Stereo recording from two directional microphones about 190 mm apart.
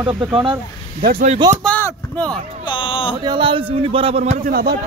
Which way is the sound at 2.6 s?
25° left (ahead or behind).